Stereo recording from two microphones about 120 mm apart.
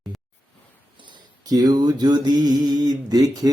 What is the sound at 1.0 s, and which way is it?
Mantra, 35° right (ahead or behind).